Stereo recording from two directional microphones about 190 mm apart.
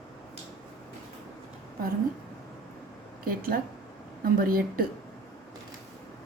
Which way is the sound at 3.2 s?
50° right (ahead or behind).